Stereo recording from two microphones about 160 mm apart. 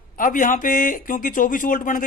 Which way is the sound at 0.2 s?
60° left (ahead or behind).